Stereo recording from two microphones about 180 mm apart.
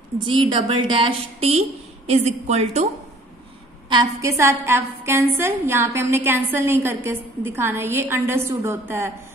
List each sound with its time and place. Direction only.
0.2 s a woman's voice: 25° right (ahead or behind)
3.9 s a woman's voice: 20° right (ahead or behind)